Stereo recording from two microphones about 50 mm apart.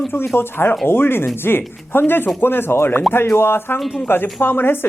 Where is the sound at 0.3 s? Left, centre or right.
Left.